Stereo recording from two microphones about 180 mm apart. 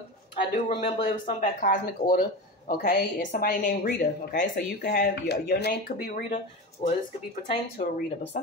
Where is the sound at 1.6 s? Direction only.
45° left (ahead or behind).